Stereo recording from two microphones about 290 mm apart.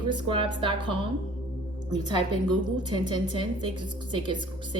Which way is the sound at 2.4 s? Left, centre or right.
Centre.